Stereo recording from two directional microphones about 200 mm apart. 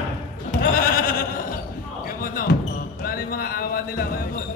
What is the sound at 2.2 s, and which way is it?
Basketball bounce, 45° left (ahead or behind).